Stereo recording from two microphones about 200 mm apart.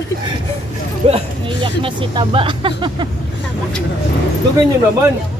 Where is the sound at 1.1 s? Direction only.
25° right (ahead or behind).